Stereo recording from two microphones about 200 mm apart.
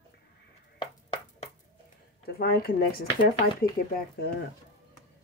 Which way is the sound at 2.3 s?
50° left (ahead or behind).